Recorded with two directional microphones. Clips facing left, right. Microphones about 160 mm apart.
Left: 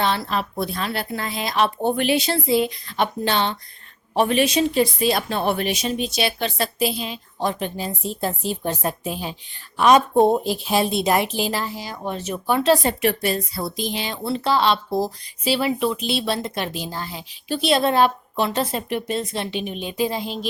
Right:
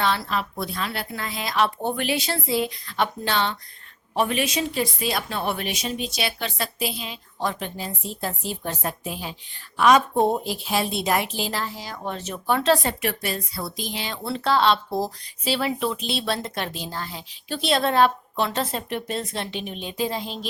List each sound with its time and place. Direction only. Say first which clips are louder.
0.0 s a woman's voice: left 2 dB; 25° left (ahead or behind)
7.3 s a woman's voice: left 3 dB; 20° left (ahead or behind)
12.9 s a woman's voice: left 6 dB; 25° left (ahead or behind)
14.3 s speech: left 1 dB; 5° left (ahead or behind)